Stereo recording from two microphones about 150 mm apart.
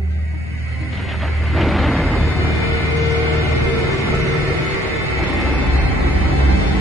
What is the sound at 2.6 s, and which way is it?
Music, centre (ahead or behind).